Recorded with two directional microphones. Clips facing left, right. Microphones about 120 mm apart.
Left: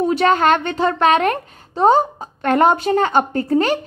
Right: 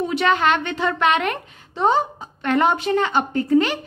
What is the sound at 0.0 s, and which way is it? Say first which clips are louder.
A child's voice: left 4 dB; 40° left (ahead or behind).